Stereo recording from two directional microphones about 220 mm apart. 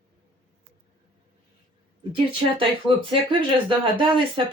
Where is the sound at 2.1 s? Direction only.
25° right (ahead or behind).